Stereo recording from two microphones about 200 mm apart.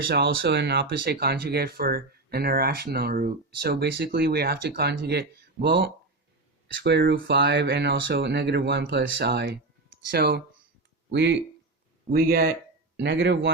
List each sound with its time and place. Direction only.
0.1 s speech: 55° right (ahead or behind)